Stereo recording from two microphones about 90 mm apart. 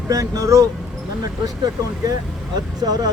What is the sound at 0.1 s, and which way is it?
Speech, 40° right (ahead or behind).